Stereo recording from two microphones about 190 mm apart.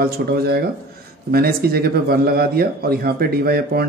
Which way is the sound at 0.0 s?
55° right (ahead or behind).